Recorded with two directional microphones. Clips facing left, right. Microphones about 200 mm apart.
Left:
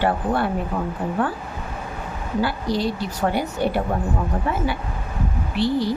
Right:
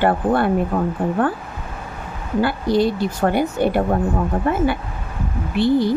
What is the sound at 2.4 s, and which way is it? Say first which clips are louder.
Speech: right 5 dB; 55° right (ahead or behind).